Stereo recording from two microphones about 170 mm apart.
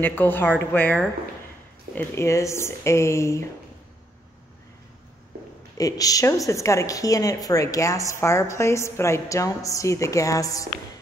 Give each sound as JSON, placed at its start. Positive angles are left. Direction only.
{"t": 0.0, "sound": "speech", "side_deg": 10}
{"t": 5.8, "sound": "a woman's voice", "side_deg": 20}